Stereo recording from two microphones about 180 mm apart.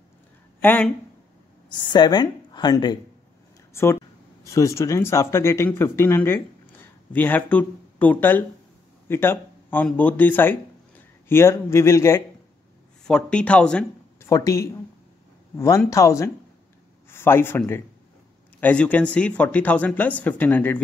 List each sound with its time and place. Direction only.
0.6 s speech: 10° left (ahead or behind)
1.7 s a woman's voice: 25° left (ahead or behind)
13.0 s speech: 5° left (ahead or behind)
14.3 s speech: 15° left (ahead or behind)